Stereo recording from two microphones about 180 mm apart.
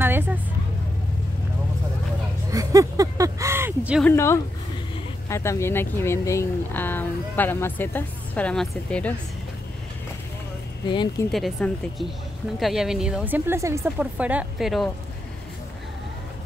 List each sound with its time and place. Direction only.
0.0 s music: 10° right (ahead or behind)
2.5 s a sound: 20° right (ahead or behind)
4.0 s speech: 15° left (ahead or behind)
10.9 s speech: 25° left (ahead or behind)
11.3 s speech: centre (ahead or behind)